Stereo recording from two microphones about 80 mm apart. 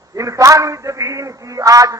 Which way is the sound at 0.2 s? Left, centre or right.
Right.